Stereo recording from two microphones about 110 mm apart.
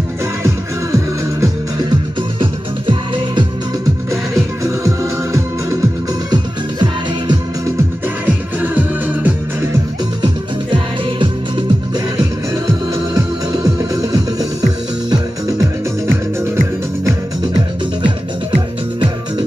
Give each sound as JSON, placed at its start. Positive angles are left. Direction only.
{"t": 0.9, "sound": "music", "side_deg": -30}
{"t": 4.6, "sound": "music", "side_deg": -25}
{"t": 6.3, "sound": "music", "side_deg": -40}
{"t": 8.5, "sound": "music", "side_deg": -15}
{"t": 10.2, "sound": "music", "side_deg": -45}